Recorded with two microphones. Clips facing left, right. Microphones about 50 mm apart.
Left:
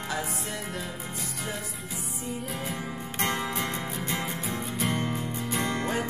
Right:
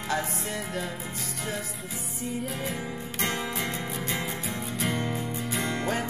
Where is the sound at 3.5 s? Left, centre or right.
Left.